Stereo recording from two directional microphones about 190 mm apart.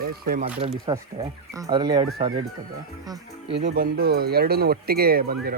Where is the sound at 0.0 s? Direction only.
50° right (ahead or behind).